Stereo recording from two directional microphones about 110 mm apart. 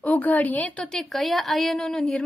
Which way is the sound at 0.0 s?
15° left (ahead or behind).